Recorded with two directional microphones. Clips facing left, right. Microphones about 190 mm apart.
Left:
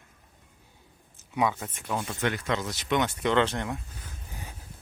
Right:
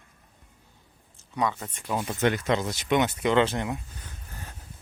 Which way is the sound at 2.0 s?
25° right (ahead or behind).